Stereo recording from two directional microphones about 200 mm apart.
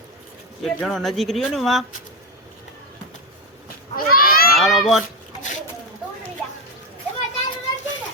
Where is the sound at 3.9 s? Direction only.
45° left (ahead or behind).